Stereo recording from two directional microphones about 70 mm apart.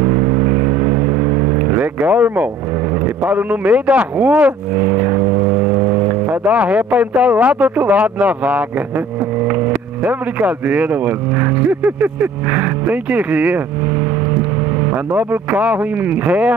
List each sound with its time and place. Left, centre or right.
0.0 s vehicle: right
3.3 s speech: right
10.0 s speech: right
15.1 s speech: centre